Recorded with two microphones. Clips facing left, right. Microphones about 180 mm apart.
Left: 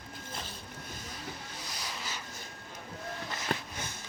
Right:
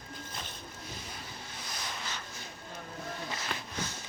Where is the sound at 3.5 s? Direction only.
45° left (ahead or behind).